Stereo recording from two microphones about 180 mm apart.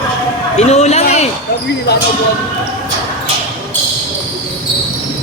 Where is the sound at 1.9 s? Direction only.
65° left (ahead or behind).